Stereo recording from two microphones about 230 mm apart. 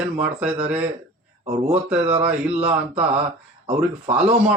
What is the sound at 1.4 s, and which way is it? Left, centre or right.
Speech, right.